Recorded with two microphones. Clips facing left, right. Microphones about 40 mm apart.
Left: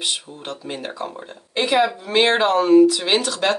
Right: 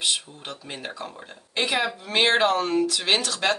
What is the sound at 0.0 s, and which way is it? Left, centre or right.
Speech, centre.